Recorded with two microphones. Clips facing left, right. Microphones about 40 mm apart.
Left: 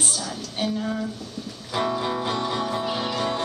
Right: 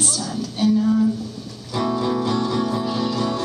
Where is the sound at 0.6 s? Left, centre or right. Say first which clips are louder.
Right 7 dB; left.